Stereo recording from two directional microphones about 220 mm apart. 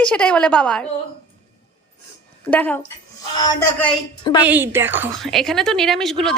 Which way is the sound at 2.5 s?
5° left (ahead or behind).